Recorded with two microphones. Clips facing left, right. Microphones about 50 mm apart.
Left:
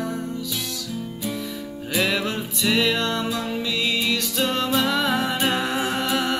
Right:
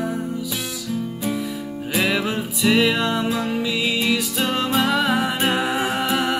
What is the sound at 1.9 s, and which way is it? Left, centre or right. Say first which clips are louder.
Music: right 2 dB; centre.